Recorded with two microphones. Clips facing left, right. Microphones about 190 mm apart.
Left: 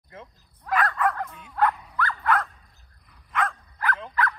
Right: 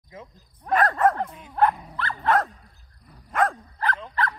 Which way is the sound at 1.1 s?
30° right (ahead or behind).